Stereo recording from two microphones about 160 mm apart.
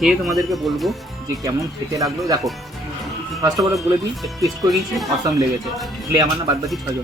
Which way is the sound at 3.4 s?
20° right (ahead or behind).